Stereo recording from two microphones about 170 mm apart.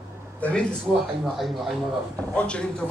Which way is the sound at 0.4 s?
10° left (ahead or behind).